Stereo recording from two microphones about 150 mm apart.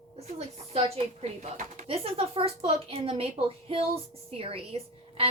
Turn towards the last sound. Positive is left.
turn(degrees=-40)  # may be behind; listen again after turning